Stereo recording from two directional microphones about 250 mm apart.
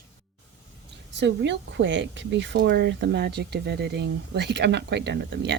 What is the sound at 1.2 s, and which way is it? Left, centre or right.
Speech, right.